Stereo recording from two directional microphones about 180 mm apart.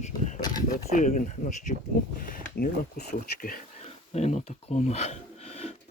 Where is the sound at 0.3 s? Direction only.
20° left (ahead or behind).